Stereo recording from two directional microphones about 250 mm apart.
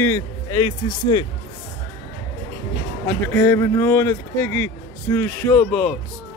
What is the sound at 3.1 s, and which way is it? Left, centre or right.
Speech, centre.